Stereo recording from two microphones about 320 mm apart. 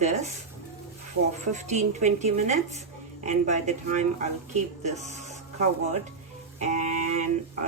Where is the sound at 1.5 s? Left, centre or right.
Right.